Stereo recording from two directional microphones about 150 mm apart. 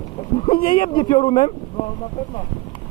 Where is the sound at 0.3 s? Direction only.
35° left (ahead or behind).